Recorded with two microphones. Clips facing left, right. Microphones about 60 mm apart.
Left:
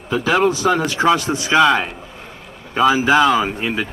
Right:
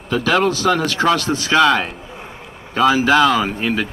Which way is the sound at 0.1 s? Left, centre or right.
Centre.